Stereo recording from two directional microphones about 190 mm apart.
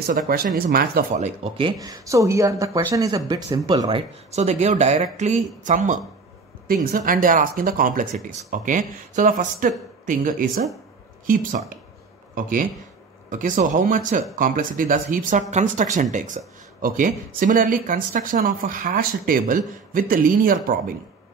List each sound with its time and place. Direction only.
0.3 s speech: 50° right (ahead or behind)
1.1 s speech: 35° right (ahead or behind)
1.8 s speech: 20° right (ahead or behind)
4.3 s speech: 35° right (ahead or behind)